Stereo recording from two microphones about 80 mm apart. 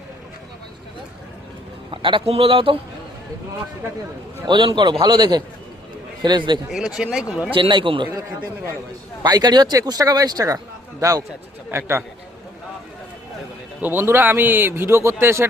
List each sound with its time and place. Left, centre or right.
1.9 s speech: right
4.4 s a man's voice: right
5.0 s a man's voice: right
6.7 s speech: centre
7.5 s speech: right
9.2 s a man's voice: right
11.7 s a man's voice: right
13.8 s speech: right